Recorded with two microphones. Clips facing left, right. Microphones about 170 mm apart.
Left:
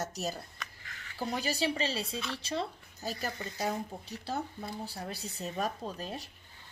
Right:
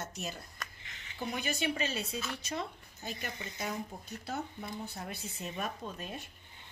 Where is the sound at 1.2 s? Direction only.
35° left (ahead or behind).